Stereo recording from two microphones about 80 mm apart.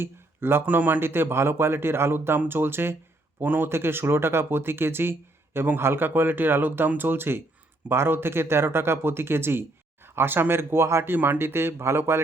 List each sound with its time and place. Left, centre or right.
0.0 s speech: right